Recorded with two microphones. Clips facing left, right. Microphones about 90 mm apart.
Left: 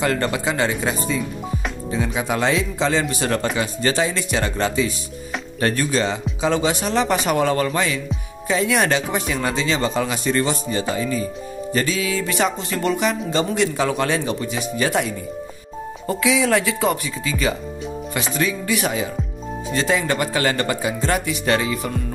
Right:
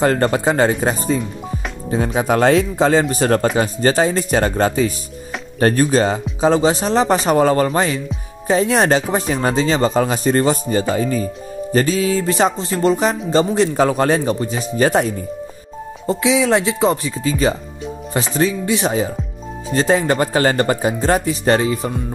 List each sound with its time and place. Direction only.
0.0 s speech: 40° right (ahead or behind)
16.1 s speech: 25° right (ahead or behind)